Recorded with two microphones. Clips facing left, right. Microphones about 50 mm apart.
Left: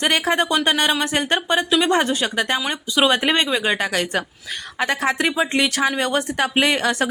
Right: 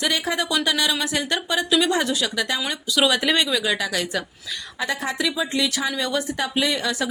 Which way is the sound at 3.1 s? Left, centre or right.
Left.